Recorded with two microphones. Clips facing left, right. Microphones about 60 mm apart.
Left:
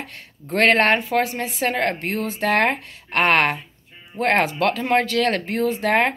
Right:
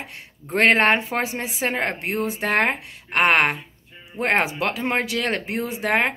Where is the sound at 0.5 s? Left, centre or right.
Right.